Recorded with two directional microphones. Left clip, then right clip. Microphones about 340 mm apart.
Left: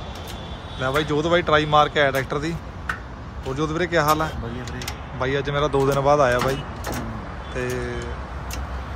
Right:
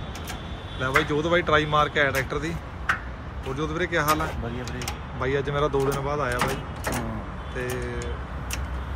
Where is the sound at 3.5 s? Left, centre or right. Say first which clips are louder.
Left 4 dB; centre.